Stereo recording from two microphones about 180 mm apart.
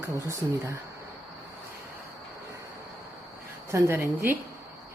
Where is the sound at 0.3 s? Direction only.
15° right (ahead or behind).